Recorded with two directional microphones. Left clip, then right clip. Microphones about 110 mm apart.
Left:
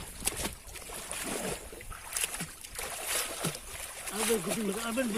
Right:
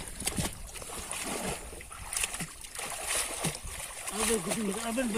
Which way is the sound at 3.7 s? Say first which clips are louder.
Right 1 dB; 5° left (ahead or behind).